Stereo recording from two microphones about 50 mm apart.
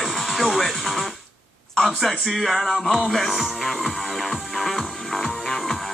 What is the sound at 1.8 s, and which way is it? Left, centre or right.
Speech, centre.